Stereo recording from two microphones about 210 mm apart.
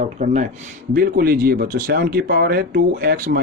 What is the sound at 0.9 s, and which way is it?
Speech, 45° right (ahead or behind).